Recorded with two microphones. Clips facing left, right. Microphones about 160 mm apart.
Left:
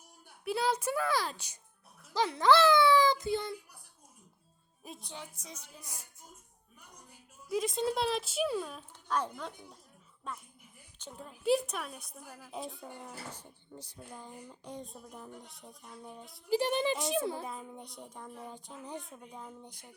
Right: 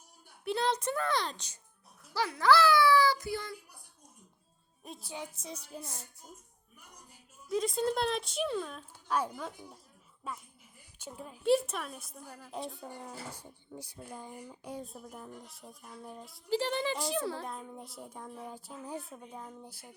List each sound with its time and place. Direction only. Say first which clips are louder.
0.4 s speech: even; 5° left (ahead or behind)
2.1 s a child's voice: left 1 dB; 20° left (ahead or behind)
4.8 s speech: right 3 dB; centre (ahead or behind)
5.3 s music: right 7 dB; 30° right (ahead or behind)
5.8 s music: right 5 dB; 10° left (ahead or behind)
7.5 s speech: right 1 dB; centre (ahead or behind)
9.0 s speech: right 1 dB; 10° right (ahead or behind)
13.3 s speech: right 2 dB; 10° right (ahead or behind)
16.5 s a child's voice: left 2 dB; 15° left (ahead or behind)
17.4 s speech: even; 5° left (ahead or behind)